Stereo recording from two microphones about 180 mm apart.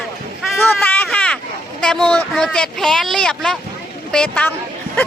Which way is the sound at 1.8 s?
5° left (ahead or behind).